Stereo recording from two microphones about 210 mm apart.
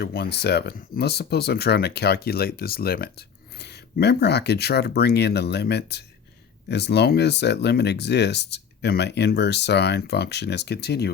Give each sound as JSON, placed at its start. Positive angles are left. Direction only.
{"t": 0.0, "sound": "speech", "side_deg": 50}